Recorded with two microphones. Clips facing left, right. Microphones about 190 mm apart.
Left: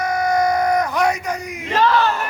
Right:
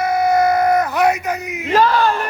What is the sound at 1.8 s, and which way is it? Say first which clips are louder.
Crowd: right 1 dB; 40° right (ahead or behind).